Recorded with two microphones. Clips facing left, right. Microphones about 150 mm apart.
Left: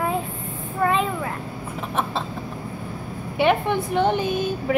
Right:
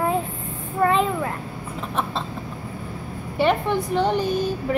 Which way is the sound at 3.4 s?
Centre (ahead or behind).